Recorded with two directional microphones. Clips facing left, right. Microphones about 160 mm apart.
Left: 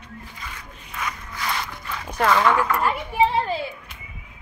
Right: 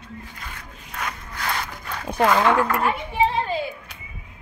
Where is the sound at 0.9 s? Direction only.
55° right (ahead or behind).